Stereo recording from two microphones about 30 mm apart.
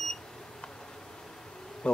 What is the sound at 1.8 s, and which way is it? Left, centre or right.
Bee, left.